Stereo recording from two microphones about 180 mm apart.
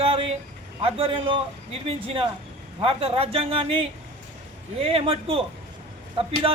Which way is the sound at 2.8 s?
30° right (ahead or behind).